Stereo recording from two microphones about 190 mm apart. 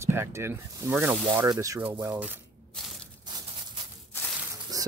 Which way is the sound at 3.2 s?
25° right (ahead or behind).